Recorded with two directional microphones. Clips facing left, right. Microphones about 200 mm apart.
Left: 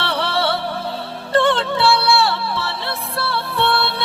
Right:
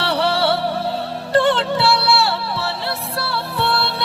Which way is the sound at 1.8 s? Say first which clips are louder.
Left 1 dB; 40° right (ahead or behind).